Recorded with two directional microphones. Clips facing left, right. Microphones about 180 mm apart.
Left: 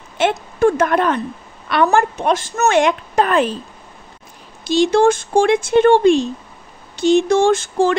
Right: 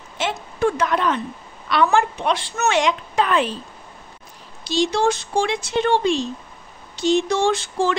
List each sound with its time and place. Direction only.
0.2 s a woman's voice: 55° left (ahead or behind)
4.6 s speech: 55° left (ahead or behind)